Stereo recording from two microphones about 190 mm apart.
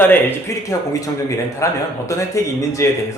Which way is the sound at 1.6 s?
15° left (ahead or behind).